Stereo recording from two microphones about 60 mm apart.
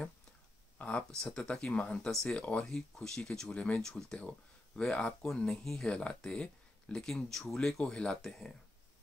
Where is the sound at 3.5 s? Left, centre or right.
Left.